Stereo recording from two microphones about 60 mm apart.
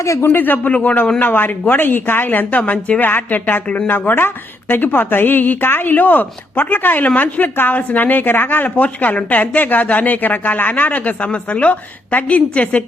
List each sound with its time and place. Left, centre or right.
0.0 s speech: left
0.3 s speech: left